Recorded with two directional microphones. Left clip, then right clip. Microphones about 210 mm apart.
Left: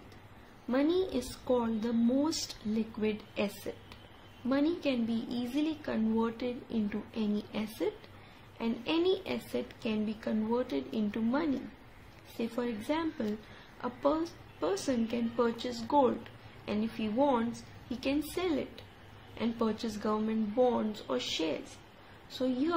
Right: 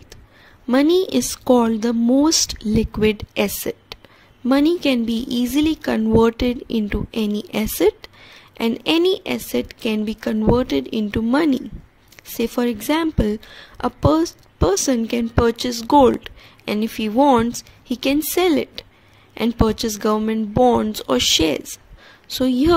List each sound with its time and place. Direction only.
0.7 s a woman's voice: 50° right (ahead or behind)